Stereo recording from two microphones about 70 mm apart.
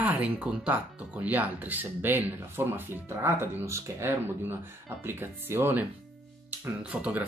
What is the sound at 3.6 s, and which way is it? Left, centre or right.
Speech, right.